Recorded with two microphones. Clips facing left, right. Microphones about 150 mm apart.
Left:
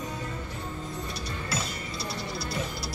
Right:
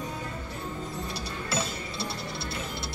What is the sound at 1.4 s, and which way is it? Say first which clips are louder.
Music: right 3 dB; 25° right (ahead or behind).